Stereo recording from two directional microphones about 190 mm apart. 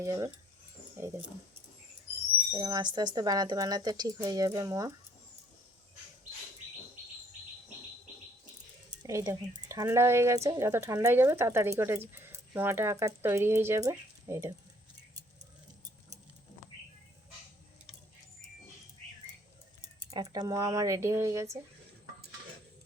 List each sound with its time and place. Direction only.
0.0 s speech: 15° right (ahead or behind)
2.5 s speech: 20° right (ahead or behind)
9.0 s speech: 15° right (ahead or behind)
20.1 s speech: 20° right (ahead or behind)